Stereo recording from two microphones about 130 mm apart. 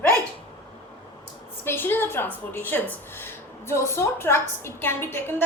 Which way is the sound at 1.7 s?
15° left (ahead or behind).